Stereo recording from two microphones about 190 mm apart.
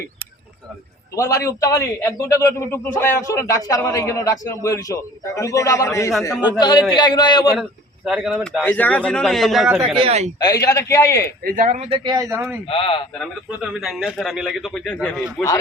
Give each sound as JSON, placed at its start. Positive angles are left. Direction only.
{"t": 1.1, "sound": "a man's voice", "side_deg": 15}
{"t": 8.0, "sound": "a man's voice", "side_deg": 0}
{"t": 8.6, "sound": "a man's voice", "side_deg": 10}
{"t": 9.8, "sound": "speech", "side_deg": -30}
{"t": 10.4, "sound": "a man's voice", "side_deg": 15}
{"t": 11.5, "sound": "a man's voice", "side_deg": -40}
{"t": 12.6, "sound": "a man's voice", "side_deg": 30}
{"t": 13.1, "sound": "a man's voice", "side_deg": 0}